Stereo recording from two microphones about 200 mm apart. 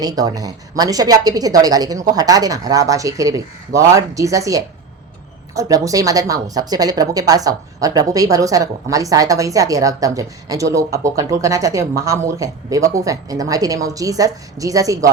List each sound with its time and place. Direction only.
0.0 s a woman's voice: 20° right (ahead or behind)